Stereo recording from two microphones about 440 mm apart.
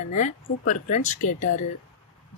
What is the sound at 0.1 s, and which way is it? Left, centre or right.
Speech, centre.